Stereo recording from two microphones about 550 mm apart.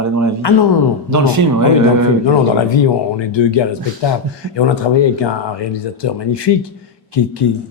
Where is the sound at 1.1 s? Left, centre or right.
Right.